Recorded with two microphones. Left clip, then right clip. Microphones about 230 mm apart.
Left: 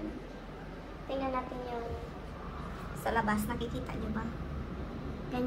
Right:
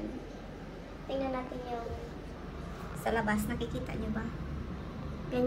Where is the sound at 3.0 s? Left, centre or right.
Centre.